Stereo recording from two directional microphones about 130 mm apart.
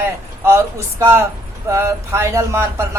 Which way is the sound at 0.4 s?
20° right (ahead or behind).